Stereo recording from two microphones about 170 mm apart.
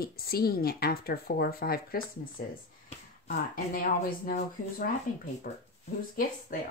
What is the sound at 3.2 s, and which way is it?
Speech, 55° left (ahead or behind).